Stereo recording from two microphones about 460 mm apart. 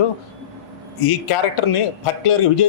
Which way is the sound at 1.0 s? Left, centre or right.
Left.